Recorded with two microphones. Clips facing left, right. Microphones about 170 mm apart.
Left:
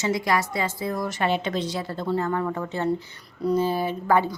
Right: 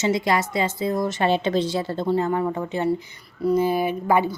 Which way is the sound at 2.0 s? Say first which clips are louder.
Right 2 dB; 15° right (ahead or behind).